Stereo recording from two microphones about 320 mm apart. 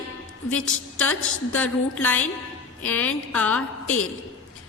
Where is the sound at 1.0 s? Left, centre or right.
Centre.